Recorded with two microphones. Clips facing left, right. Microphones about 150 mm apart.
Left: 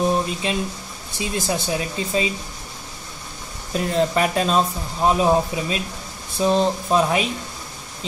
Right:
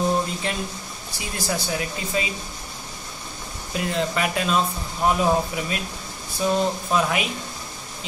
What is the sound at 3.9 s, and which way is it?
Speech, 35° left (ahead or behind).